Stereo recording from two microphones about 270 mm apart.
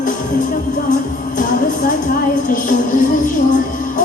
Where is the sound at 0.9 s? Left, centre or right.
Left.